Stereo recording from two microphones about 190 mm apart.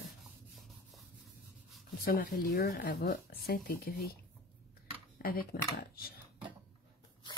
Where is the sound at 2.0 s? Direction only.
50° left (ahead or behind).